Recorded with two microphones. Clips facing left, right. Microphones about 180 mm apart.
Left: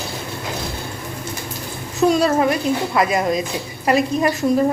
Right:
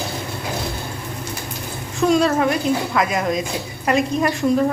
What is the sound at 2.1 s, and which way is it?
A woman's voice, 5° left (ahead or behind).